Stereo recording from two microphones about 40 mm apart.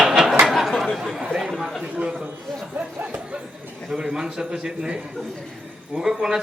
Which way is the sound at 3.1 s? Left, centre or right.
Right.